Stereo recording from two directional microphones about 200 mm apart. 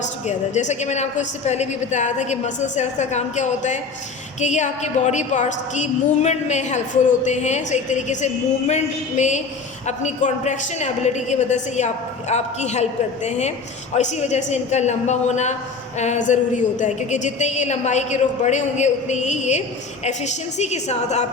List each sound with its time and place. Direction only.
0.3 s a woman's voice: 35° left (ahead or behind)